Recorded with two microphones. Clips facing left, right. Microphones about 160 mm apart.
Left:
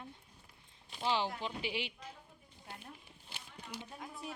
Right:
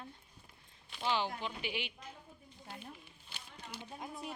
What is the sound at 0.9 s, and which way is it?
A woman's voice, 30° left (ahead or behind).